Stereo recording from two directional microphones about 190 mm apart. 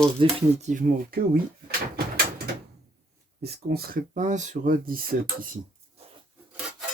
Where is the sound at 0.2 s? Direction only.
40° right (ahead or behind).